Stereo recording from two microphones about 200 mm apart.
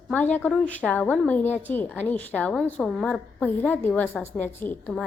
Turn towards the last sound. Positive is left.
turn(degrees=10)  # may be behind; listen again after turning